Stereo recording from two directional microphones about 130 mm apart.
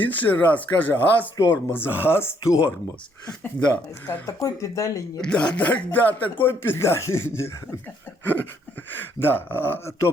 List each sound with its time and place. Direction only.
0.0 s speech: 15° left (ahead or behind)
4.0 s speech: 20° left (ahead or behind)
5.2 s speech: 5° left (ahead or behind)
8.9 s speech: 15° left (ahead or behind)